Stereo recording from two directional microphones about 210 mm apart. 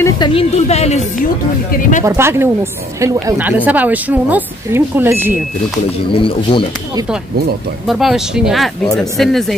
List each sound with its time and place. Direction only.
0.0 s speech: 25° left (ahead or behind)
2.0 s speech: 10° right (ahead or behind)
6.1 s speech: 25° left (ahead or behind)
7.9 s speech: centre (ahead or behind)